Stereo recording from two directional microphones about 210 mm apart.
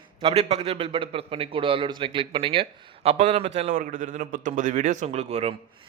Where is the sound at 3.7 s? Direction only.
40° right (ahead or behind).